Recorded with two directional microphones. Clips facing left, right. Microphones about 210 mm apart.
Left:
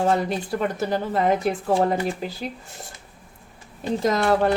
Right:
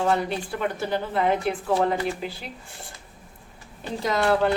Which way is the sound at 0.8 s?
40° left (ahead or behind).